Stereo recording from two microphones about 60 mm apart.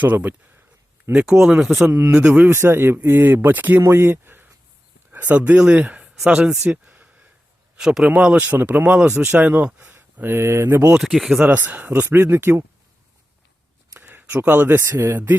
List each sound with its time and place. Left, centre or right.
0.0 s speech: right
1.2 s speech: centre
2.1 s speech: right
2.5 s speech: right
3.8 s speech: right
5.4 s speech: centre
8.4 s speech: right
11.0 s speech: centre
11.4 s speech: right
14.0 s a sound: right
14.8 s speech: right